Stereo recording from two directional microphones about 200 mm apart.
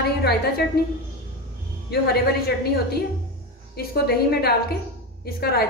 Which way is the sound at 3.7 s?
50° left (ahead or behind).